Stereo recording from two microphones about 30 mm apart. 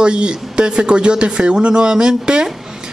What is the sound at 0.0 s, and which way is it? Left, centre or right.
Speech, right.